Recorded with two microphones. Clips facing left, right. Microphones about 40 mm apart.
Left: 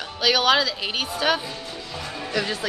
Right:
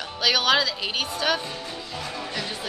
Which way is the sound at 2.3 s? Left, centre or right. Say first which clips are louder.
Left 6 dB; left.